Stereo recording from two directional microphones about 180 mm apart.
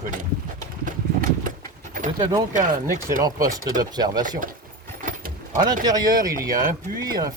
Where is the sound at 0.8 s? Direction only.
45° right (ahead or behind).